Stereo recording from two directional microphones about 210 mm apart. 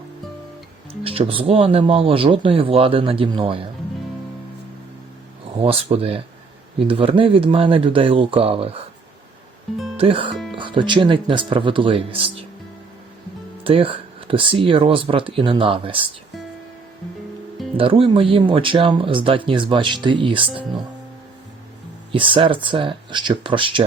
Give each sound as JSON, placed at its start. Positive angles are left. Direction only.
{"t": 1.0, "sound": "speech", "side_deg": -25}
{"t": 5.6, "sound": "speech", "side_deg": -25}
{"t": 10.0, "sound": "speech", "side_deg": -25}
{"t": 10.3, "sound": "music", "side_deg": 0}
{"t": 10.6, "sound": "speech", "side_deg": -25}
{"t": 13.7, "sound": "speech", "side_deg": -25}
{"t": 17.7, "sound": "speech", "side_deg": -25}
{"t": 22.1, "sound": "speech", "side_deg": -25}